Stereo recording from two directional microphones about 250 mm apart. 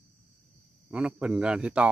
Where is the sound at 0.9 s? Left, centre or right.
Centre.